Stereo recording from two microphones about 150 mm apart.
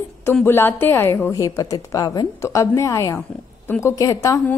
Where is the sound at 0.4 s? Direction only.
15° left (ahead or behind).